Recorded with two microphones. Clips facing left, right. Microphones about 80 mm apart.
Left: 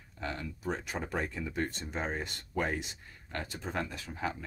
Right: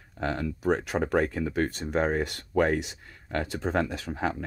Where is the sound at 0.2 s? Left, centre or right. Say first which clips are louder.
Right 9 dB; right.